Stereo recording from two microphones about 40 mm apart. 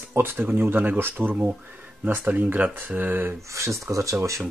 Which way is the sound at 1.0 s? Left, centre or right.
Right.